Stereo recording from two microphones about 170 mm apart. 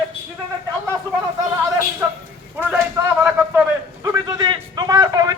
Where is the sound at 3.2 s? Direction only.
10° right (ahead or behind).